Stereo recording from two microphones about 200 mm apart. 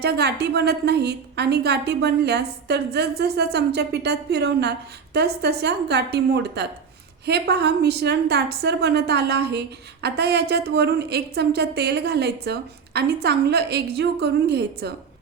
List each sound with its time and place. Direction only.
0.0 s a woman's voice: 55° right (ahead or behind)